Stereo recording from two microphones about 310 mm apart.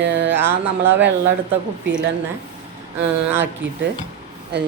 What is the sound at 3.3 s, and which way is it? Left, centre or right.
Speech, right.